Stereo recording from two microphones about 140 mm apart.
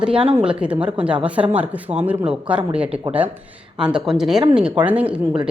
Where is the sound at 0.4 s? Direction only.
10° right (ahead or behind).